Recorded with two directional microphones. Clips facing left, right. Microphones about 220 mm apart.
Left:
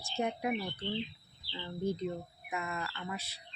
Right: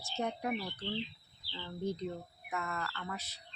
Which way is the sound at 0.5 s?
25° left (ahead or behind).